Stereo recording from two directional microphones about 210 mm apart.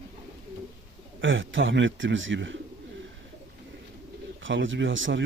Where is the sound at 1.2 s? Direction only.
65° right (ahead or behind).